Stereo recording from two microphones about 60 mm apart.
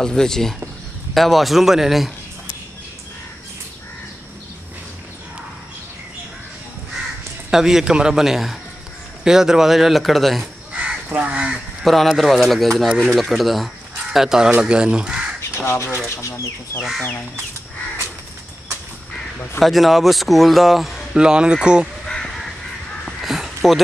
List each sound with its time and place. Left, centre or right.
0.0 s speech: centre
7.5 s a man's voice: centre
11.1 s speech: right
11.8 s a man's voice: centre
15.5 s speech: left
16.2 s speech: left
19.6 s speech: centre
21.2 s a man's voice: centre
22.0 s crow: centre
23.2 s a sound: centre